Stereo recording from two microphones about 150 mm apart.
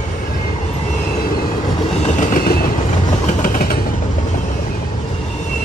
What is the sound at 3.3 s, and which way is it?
Train, 65° left (ahead or behind).